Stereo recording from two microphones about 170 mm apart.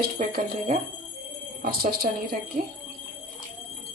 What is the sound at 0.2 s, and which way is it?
Speech, 50° right (ahead or behind).